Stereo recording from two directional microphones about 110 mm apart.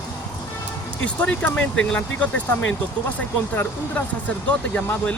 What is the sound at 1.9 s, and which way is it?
Speech, 10° left (ahead or behind).